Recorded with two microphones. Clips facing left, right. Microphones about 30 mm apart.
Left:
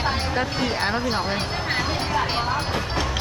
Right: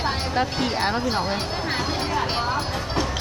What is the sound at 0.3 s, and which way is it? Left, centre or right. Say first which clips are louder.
Speech: right 1 dB; centre.